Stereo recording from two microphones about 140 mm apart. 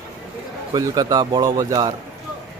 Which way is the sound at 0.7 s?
30° right (ahead or behind).